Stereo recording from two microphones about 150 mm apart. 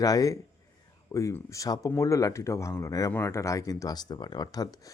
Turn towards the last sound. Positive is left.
turn(degrees=25)  # may be behind; listen again after turning